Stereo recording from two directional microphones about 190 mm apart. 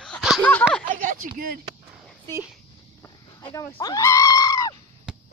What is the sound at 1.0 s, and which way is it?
Speech, 45° right (ahead or behind).